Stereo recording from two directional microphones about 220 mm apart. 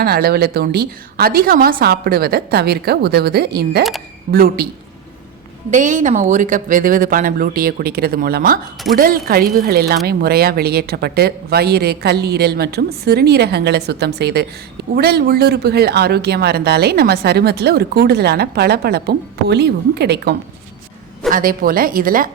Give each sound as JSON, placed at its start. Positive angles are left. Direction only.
{"t": 0.0, "sound": "speech", "side_deg": -45}
{"t": 5.7, "sound": "speech", "side_deg": -35}
{"t": 21.2, "sound": "speech", "side_deg": -40}